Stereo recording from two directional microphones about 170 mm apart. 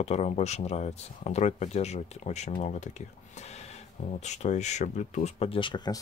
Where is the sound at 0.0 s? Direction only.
40° left (ahead or behind).